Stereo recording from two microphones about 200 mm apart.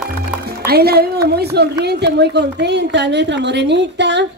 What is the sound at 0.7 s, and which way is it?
A woman's voice, 50° right (ahead or behind).